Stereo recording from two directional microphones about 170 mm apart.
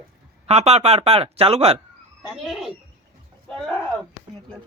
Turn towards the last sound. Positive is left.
turn(degrees=0)  # may be behind; listen again after turning